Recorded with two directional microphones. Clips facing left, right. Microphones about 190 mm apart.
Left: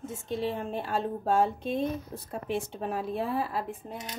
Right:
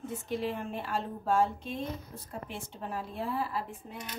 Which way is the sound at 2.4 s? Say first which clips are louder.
Left 13 dB; 70° left (ahead or behind).